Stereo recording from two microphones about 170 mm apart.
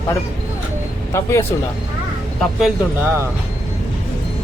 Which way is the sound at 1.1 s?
15° left (ahead or behind).